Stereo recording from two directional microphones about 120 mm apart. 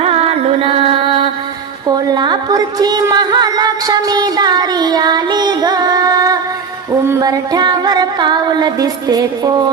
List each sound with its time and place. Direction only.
0.0 s music: 55° right (ahead or behind); by 9.7 s 35° right (ahead or behind)